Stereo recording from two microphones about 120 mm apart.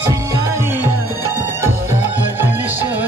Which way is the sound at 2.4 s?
15° right (ahead or behind).